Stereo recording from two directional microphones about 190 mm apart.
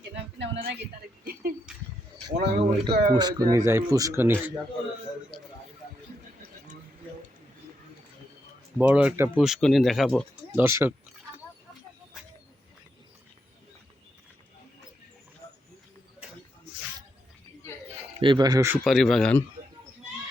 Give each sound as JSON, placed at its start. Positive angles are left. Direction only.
{"t": 0.3, "sound": "speech", "side_deg": -70}
{"t": 1.2, "sound": "speech", "side_deg": -50}
{"t": 2.3, "sound": "speech", "side_deg": -60}
{"t": 2.6, "sound": "speech", "side_deg": -30}
{"t": 5.3, "sound": "music", "side_deg": 0}
{"t": 8.8, "sound": "speech", "side_deg": -5}
{"t": 10.5, "sound": "speech", "side_deg": -15}
{"t": 18.2, "sound": "speech", "side_deg": -25}
{"t": 18.9, "sound": "speech", "side_deg": 0}